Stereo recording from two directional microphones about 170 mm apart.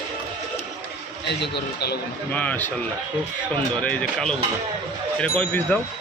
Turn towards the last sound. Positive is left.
turn(degrees=5)  # may be behind; listen again after turning